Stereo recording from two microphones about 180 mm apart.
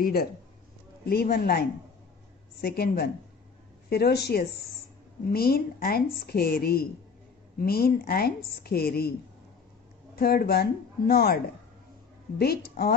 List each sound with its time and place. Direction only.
0.0 s a woman's voice: 60° left (ahead or behind)
10.1 s a woman's voice: 60° left (ahead or behind)